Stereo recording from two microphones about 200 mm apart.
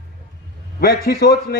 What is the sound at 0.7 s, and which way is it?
Speech, 50° left (ahead or behind).